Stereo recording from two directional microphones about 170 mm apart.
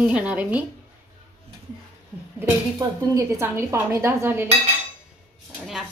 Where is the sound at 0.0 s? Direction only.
5° right (ahead or behind).